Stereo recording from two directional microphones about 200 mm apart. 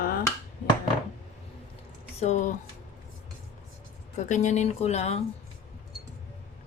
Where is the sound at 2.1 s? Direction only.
35° left (ahead or behind).